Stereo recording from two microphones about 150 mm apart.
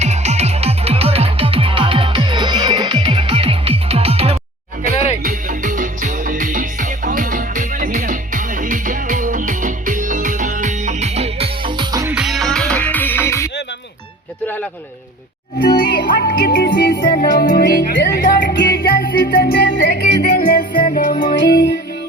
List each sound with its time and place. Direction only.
0.0 s music: 50° right (ahead or behind)
5.2 s music: 65° right (ahead or behind); by 12.1 s 25° right (ahead or behind)
12.1 s music: centre (ahead or behind); by 13.5 s 15° left (ahead or behind)
14.4 s a sound: 10° left (ahead or behind)
15.5 s music: 90° left; by 21.3 s 60° left (ahead or behind)
21.5 s music: 90° left